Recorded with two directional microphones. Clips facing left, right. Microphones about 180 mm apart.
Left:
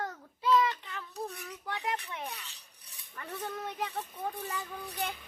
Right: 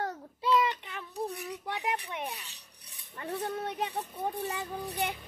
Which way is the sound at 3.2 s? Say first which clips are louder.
Right 5 dB; 35° right (ahead or behind).